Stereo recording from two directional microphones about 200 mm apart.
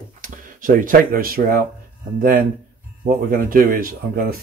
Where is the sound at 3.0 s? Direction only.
45° right (ahead or behind).